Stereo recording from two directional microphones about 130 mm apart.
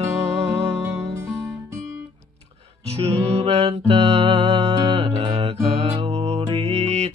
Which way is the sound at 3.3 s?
45° right (ahead or behind).